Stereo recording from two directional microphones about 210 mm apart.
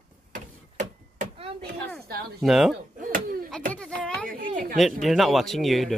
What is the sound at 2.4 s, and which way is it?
Speech, centre (ahead or behind).